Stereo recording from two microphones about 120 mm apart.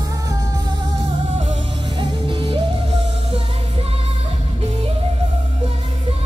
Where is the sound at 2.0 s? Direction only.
45° right (ahead or behind).